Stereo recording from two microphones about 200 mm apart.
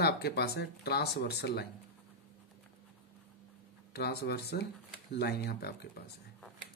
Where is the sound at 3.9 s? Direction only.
55° left (ahead or behind).